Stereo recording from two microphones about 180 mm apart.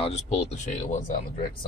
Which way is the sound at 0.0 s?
40° left (ahead or behind).